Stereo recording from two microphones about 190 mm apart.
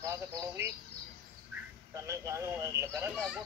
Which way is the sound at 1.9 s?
15° right (ahead or behind).